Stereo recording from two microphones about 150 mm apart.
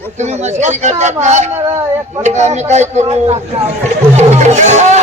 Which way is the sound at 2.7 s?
50° right (ahead or behind).